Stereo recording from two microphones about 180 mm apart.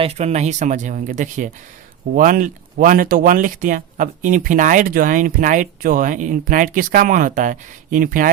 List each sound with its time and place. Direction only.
0.0 s speech: 35° right (ahead or behind)